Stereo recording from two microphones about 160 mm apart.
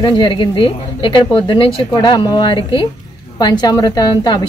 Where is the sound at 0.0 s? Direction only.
30° left (ahead or behind).